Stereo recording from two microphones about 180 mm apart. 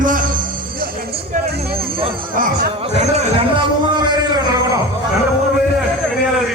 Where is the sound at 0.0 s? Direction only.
50° right (ahead or behind).